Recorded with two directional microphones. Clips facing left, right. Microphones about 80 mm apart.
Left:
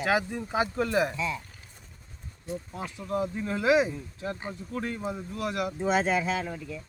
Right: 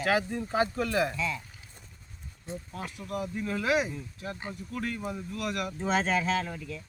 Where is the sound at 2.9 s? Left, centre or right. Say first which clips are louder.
Left 5 dB; left.